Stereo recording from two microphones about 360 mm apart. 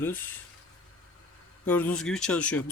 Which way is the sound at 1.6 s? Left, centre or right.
Centre.